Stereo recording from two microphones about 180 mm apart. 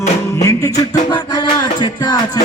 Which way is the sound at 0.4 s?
20° left (ahead or behind).